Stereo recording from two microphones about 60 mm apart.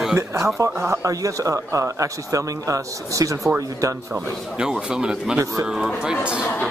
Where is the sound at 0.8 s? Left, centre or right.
Right.